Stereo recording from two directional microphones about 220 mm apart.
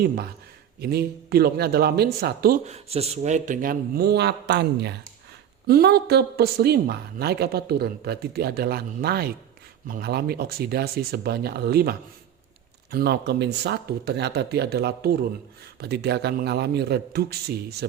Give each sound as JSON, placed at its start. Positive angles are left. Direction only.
{"t": 0.8, "sound": "speech", "side_deg": -45}
{"t": 2.6, "sound": "speech", "side_deg": -30}